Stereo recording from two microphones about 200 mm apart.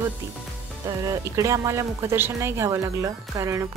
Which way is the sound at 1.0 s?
15° right (ahead or behind).